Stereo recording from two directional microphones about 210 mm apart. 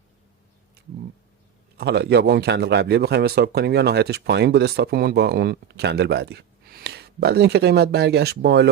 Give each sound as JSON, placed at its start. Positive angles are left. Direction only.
{"t": 1.8, "sound": "a man's voice", "side_deg": -50}